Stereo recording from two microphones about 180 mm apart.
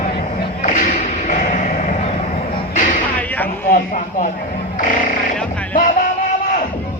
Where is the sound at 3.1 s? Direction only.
10° left (ahead or behind).